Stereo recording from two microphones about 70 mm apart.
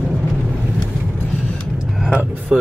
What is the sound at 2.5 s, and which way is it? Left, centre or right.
Vehicle, centre.